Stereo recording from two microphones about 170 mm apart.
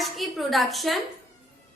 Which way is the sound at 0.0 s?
Centre (ahead or behind).